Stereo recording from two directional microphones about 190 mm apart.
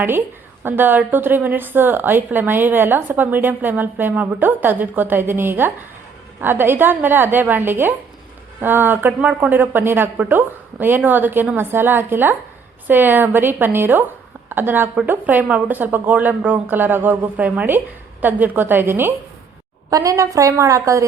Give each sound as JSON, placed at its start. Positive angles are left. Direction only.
{"t": 0.6, "sound": "a woman's voice", "side_deg": -10}